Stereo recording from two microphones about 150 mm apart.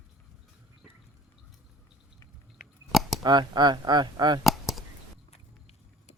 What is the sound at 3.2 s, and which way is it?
Speech, 30° right (ahead or behind).